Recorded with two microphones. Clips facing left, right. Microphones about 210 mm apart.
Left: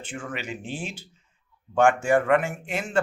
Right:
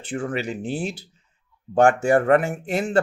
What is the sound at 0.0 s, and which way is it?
Speech, 35° right (ahead or behind).